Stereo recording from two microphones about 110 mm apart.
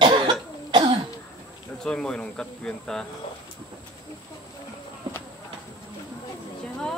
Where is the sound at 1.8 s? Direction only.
5° left (ahead or behind).